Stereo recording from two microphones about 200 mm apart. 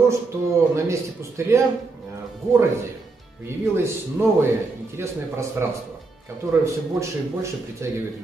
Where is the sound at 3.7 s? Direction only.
10° right (ahead or behind).